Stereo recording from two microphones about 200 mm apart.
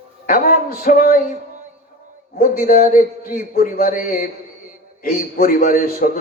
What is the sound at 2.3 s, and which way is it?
A man's voice, 45° left (ahead or behind).